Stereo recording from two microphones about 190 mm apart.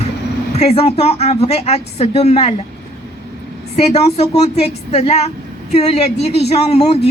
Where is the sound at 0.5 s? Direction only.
30° left (ahead or behind).